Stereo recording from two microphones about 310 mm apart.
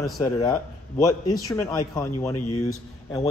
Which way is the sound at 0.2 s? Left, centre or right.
Centre.